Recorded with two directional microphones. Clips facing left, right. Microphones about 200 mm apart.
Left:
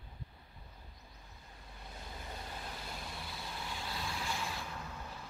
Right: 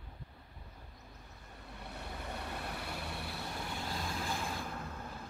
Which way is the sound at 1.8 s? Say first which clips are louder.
Right 4 dB; 65° right (ahead or behind).